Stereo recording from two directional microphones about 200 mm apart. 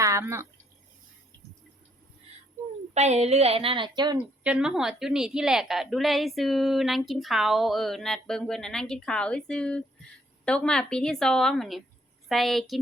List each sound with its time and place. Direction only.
0.0 s a sound: 15° right (ahead or behind)
2.9 s a woman's voice: 35° right (ahead or behind)
4.4 s a woman's voice: 5° right (ahead or behind)